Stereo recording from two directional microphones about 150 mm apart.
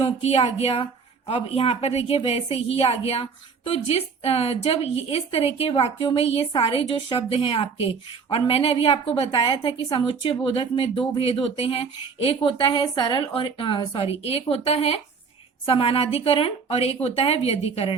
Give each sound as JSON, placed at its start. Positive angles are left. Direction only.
{"t": 0.0, "sound": "a woman's voice", "side_deg": 45}